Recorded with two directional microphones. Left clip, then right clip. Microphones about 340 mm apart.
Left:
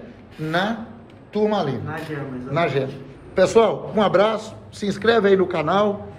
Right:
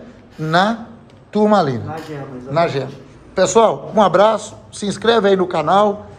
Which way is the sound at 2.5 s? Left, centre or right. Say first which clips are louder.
Right 4 dB; centre.